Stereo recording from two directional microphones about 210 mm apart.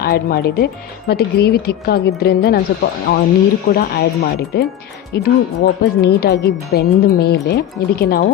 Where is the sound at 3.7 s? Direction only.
45° left (ahead or behind).